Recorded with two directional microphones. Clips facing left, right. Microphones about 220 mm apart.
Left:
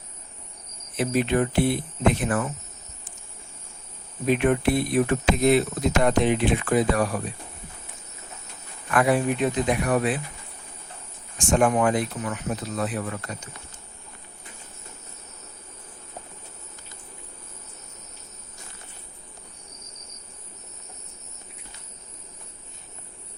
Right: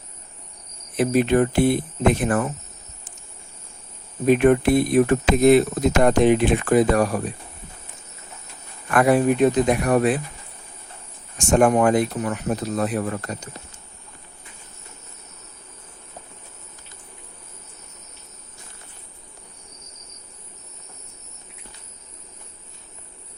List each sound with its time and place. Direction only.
0.9 s speech: 50° right (ahead or behind)
4.3 s speech: 45° right (ahead or behind)
8.9 s speech: 50° right (ahead or behind)
11.3 s speech: 45° right (ahead or behind)